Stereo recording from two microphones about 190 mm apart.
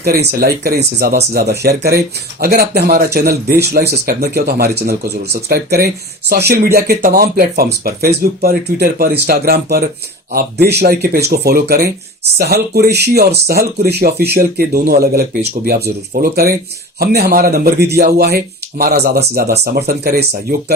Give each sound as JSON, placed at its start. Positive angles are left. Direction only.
{"t": 0.0, "sound": "speech", "side_deg": -55}